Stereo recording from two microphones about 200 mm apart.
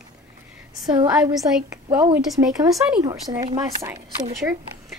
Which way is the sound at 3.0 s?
20° right (ahead or behind).